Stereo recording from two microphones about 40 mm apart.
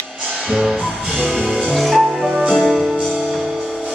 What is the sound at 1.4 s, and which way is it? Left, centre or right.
Music, centre.